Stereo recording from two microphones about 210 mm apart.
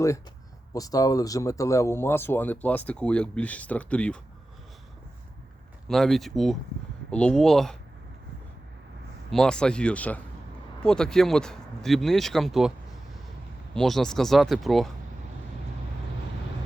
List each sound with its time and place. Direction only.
0.7 s speech: 15° left (ahead or behind)
5.9 s speech: centre (ahead or behind)
9.3 s speech: 5° left (ahead or behind)
13.7 s speech: centre (ahead or behind)